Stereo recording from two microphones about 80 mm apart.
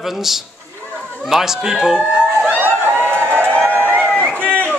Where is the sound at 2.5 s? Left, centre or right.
Right.